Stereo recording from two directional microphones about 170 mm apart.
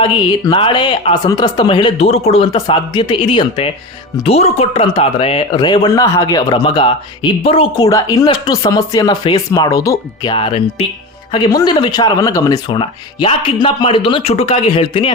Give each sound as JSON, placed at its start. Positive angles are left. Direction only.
{"t": 0.0, "sound": "speech", "side_deg": 25}
{"t": 7.9, "sound": "speech", "side_deg": 20}
{"t": 10.3, "sound": "speech", "side_deg": 30}